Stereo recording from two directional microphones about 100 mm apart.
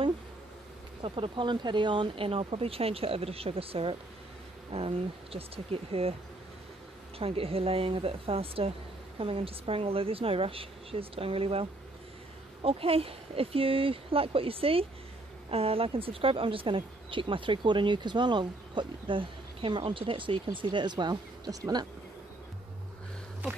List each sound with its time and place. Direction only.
1.0 s speech: 60° right (ahead or behind)
7.2 s speech: 70° right (ahead or behind)
12.6 s speech: 70° right (ahead or behind); by 21.8 s 35° right (ahead or behind)